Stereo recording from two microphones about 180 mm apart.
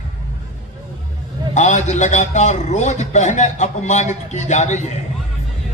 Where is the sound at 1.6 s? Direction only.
40° left (ahead or behind).